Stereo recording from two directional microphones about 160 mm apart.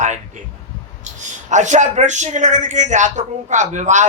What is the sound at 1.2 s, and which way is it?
Speech, 50° right (ahead or behind).